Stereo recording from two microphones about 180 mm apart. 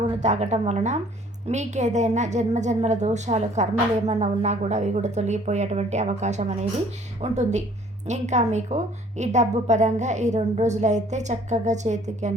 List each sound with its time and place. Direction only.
0.2 s a woman's voice: 40° right (ahead or behind)